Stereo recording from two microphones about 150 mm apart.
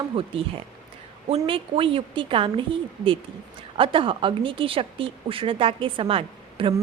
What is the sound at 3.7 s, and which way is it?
Speech, 35° right (ahead or behind).